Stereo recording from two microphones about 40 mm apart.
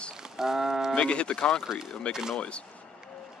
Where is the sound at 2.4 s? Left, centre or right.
Left.